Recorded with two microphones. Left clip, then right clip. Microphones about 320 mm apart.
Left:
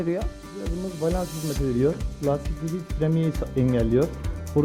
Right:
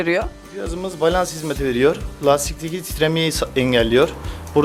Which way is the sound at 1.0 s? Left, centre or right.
Centre.